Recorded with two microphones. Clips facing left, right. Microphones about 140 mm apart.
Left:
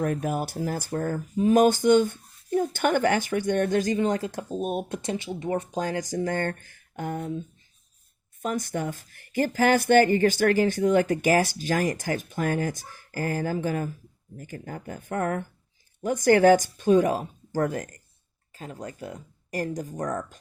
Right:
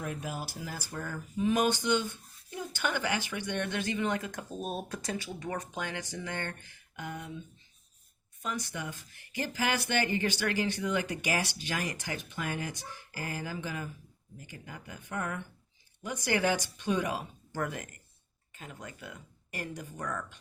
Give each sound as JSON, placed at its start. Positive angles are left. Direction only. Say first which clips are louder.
{"t": 0.2, "sound": "speech", "louder": "left 10 dB", "side_deg": 55}